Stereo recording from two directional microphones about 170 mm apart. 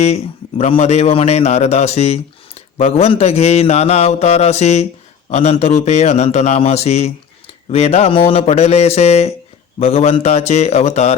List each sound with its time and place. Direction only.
0.0 s a man's voice: 40° left (ahead or behind)